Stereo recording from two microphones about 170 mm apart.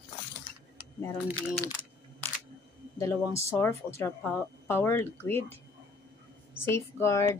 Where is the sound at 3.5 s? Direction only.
15° left (ahead or behind).